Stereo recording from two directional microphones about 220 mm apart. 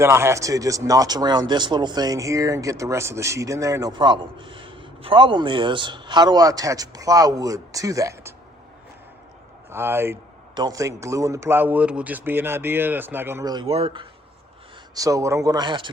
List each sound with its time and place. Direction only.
0.0 s speech: 10° right (ahead or behind)
9.6 s speech: 10° right (ahead or behind)